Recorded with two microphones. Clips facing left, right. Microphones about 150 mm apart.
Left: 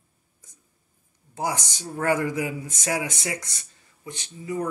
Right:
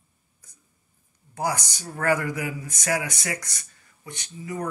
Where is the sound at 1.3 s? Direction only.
25° left (ahead or behind).